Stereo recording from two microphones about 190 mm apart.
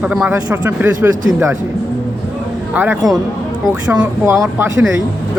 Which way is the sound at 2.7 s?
10° right (ahead or behind).